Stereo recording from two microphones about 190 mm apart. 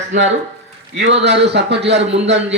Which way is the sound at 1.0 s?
70° right (ahead or behind).